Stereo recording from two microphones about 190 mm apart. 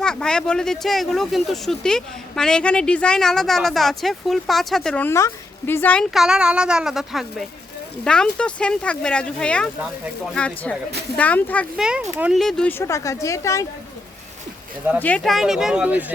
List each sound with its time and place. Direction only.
0.0 s speech: 5° left (ahead or behind)
11.8 s speech: 5° right (ahead or behind)
12.8 s speech: 15° left (ahead or behind)
14.9 s speech: 10° left (ahead or behind); by 16.1 s 10° right (ahead or behind)